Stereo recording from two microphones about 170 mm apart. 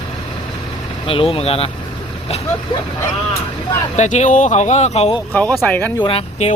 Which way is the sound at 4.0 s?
45° left (ahead or behind).